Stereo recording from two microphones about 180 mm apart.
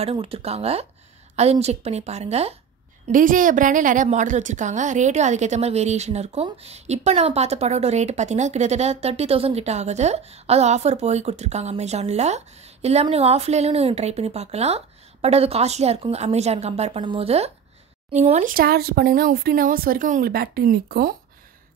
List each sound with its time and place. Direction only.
0.0 s a woman's voice: 30° right (ahead or behind)
3.1 s a woman's voice: 50° right (ahead or behind)